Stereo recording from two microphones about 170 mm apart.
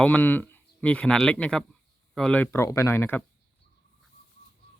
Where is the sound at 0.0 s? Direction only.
10° left (ahead or behind).